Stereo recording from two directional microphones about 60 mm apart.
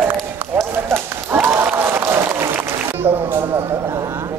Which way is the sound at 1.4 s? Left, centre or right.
Right.